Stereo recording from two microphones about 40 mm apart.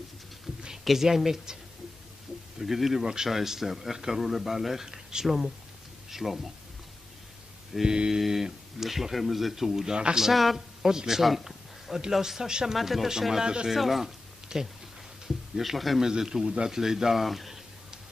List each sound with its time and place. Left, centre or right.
0.8 s speech: centre
2.6 s speech: centre
7.7 s speech: centre
8.2 s speech: centre
11.2 s a sound: centre
12.1 s speech: centre
12.7 s speech: centre
13.4 s speech: right
13.7 s speech: centre
16.0 s speech: centre